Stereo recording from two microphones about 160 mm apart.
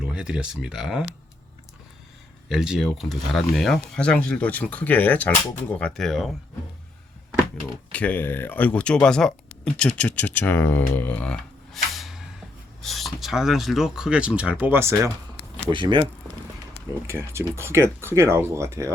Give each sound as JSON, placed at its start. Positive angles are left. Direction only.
{"t": 0.0, "sound": "speech", "side_deg": -5}
{"t": 2.5, "sound": "speech", "side_deg": 0}
{"t": 7.9, "sound": "speech", "side_deg": 10}
{"t": 10.9, "sound": "a sound", "side_deg": 10}
{"t": 12.8, "sound": "speech", "side_deg": 0}
{"t": 15.7, "sound": "speech", "side_deg": -30}
{"t": 17.1, "sound": "speech", "side_deg": -15}